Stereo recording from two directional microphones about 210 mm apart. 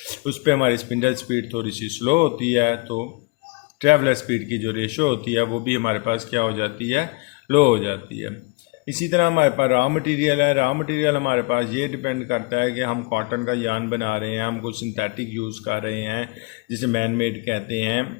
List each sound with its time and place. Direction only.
0.3 s a man's voice: 40° right (ahead or behind)